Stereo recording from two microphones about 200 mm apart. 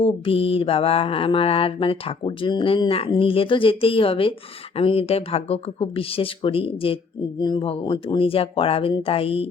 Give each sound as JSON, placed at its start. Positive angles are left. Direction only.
{"t": 0.0, "sound": "speech", "side_deg": 30}